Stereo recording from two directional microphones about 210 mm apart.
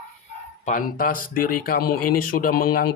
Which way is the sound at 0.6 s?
40° left (ahead or behind).